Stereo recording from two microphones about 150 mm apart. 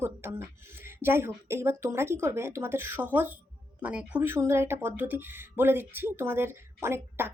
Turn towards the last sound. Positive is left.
turn(degrees=-15)  # may be behind; listen again after turning